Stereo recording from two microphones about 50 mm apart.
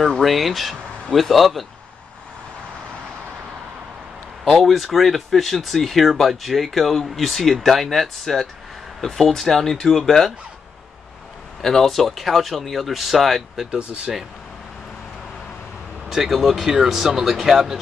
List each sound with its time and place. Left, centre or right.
0.2 s speech: centre
4.5 s speech: centre
11.6 s speech: centre
16.1 s speech: centre